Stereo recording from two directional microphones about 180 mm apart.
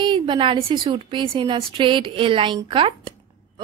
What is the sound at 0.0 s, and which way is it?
A woman's voice, 25° right (ahead or behind).